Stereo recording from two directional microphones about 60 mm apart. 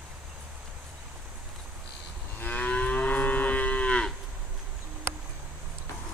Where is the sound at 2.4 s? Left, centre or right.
Left.